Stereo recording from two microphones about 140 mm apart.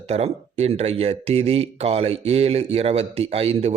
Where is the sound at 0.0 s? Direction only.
50° right (ahead or behind).